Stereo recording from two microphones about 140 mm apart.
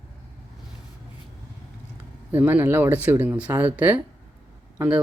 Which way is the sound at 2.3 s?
15° right (ahead or behind).